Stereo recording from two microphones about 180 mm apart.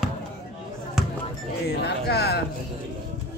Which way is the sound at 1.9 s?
65° left (ahead or behind).